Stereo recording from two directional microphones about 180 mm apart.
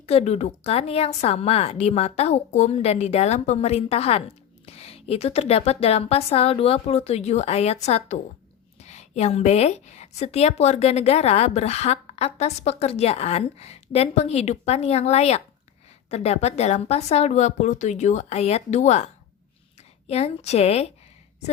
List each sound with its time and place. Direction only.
0.0 s a woman's voice: 35° left (ahead or behind)
20.1 s a woman's voice: 35° left (ahead or behind)